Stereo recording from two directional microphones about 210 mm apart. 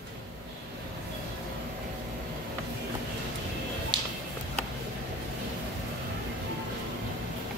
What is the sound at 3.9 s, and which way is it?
Music, 20° right (ahead or behind).